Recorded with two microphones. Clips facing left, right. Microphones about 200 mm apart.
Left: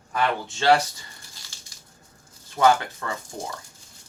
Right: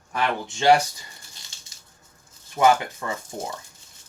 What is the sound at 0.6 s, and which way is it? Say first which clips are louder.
Speech: right 2 dB; 15° right (ahead or behind).